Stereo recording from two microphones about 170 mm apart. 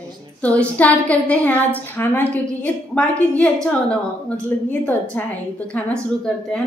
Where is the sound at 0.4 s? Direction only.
10° left (ahead or behind).